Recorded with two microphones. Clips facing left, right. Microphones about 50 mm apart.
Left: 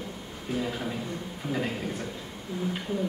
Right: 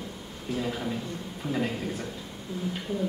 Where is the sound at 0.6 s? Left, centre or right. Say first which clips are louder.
Right 1 dB; centre.